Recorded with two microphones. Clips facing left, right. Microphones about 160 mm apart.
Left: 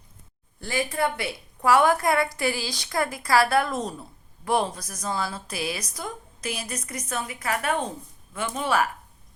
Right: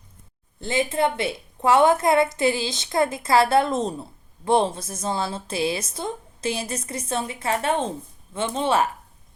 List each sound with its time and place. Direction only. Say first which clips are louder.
0.6 s a woman's voice: right 4 dB; 20° right (ahead or behind)